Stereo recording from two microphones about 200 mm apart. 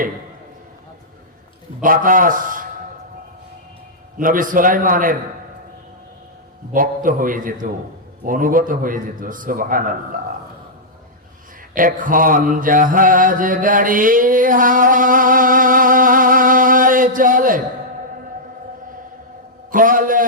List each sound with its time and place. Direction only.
1.8 s a man's voice: 45° right (ahead or behind)
4.2 s a man's voice: 45° right (ahead or behind)
6.7 s a man's voice: 45° right (ahead or behind)
11.7 s mantra: 45° right (ahead or behind)
19.7 s a man's voice: 45° right (ahead or behind)